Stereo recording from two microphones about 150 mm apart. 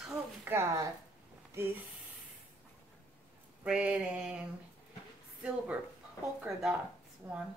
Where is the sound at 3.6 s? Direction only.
10° right (ahead or behind).